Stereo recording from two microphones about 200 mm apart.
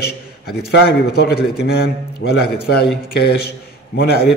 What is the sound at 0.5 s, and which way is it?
Mantra, 55° left (ahead or behind).